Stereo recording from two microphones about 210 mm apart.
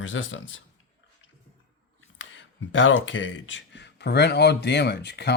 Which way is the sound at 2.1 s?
60° left (ahead or behind).